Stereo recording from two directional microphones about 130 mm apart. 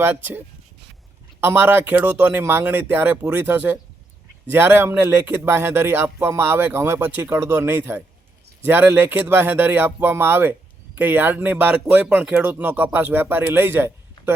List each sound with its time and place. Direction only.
0.0 s speech: 15° right (ahead or behind)